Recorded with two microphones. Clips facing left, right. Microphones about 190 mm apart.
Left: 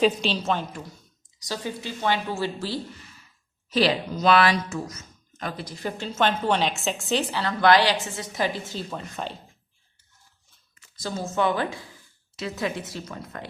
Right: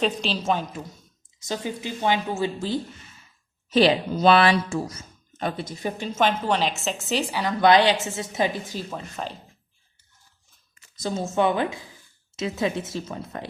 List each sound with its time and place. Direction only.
0.0 s a woman's voice: centre (ahead or behind)
1.4 s speech: 20° right (ahead or behind)
6.1 s a woman's voice: 5° right (ahead or behind); by 8.8 s 20° right (ahead or behind)
8.9 s a woman's voice: centre (ahead or behind)
10.9 s speech: 25° right (ahead or behind)